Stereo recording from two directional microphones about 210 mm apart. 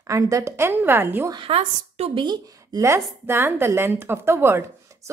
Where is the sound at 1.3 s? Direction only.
25° right (ahead or behind).